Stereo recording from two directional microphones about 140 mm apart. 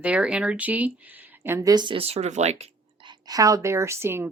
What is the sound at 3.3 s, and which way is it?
Speech, 25° right (ahead or behind).